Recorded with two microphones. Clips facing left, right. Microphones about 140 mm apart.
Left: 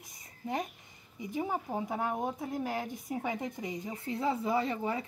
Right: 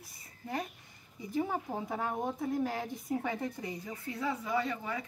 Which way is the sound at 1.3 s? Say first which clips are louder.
Even; 10° left (ahead or behind).